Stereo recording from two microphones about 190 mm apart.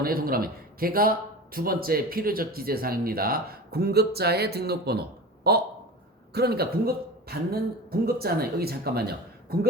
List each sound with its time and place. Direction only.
0.0 s a man's voice: 50° right (ahead or behind)